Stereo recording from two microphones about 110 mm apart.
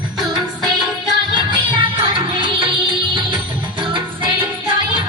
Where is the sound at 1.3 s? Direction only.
45° right (ahead or behind).